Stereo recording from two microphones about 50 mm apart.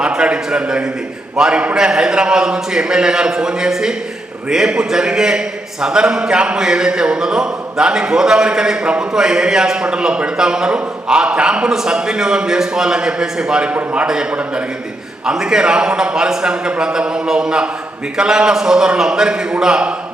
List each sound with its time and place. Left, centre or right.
0.0 s a man's voice: centre